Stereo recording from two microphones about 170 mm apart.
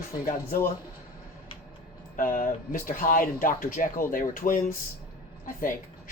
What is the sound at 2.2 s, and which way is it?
Speech, 55° left (ahead or behind).